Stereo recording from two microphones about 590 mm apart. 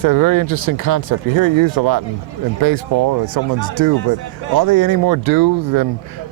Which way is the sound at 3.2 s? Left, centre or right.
Right.